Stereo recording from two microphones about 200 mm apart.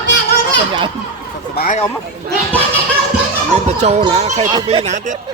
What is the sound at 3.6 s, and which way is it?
Speech, 35° right (ahead or behind).